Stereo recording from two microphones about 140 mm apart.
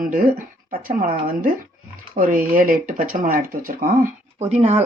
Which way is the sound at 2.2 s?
75° right (ahead or behind).